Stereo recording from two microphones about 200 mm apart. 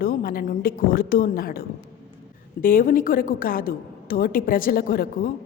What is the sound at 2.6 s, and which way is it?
A woman's voice, 45° left (ahead or behind).